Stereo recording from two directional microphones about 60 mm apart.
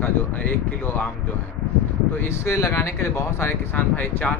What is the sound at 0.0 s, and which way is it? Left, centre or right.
Speech, left.